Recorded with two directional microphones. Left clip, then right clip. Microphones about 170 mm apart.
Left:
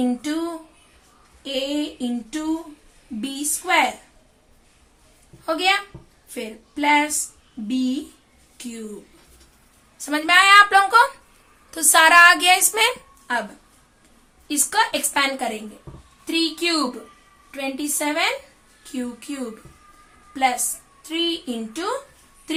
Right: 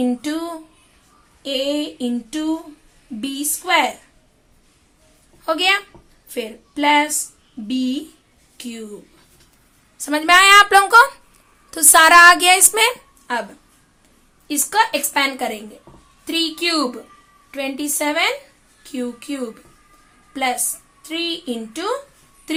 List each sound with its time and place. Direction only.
0.0 s a sound: 15° right (ahead or behind)
1.4 s female singing: 25° right (ahead or behind)
3.2 s a woman's voice: 20° right (ahead or behind)
5.5 s a woman's voice: 25° right (ahead or behind)
6.2 s a sound: 20° right (ahead or behind)
7.7 s a woman's voice: 20° right (ahead or behind)
10.0 s a woman's voice: 30° right (ahead or behind)
13.3 s a woman's voice: 15° right (ahead or behind)